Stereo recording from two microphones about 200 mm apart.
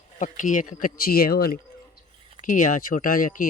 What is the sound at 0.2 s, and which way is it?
Speech, 40° left (ahead or behind).